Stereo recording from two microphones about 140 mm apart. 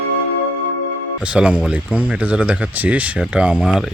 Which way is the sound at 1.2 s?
10° right (ahead or behind).